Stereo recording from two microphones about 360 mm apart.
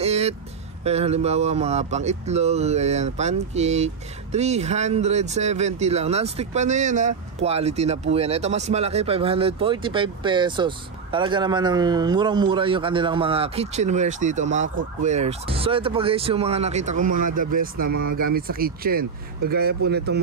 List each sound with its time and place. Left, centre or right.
0.0 s music: centre
0.8 s speech: centre